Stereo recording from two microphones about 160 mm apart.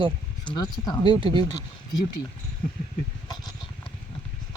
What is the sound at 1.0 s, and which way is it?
Speech, 30° right (ahead or behind).